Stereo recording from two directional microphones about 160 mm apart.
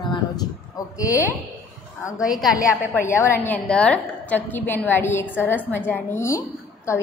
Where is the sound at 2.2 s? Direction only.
Centre (ahead or behind).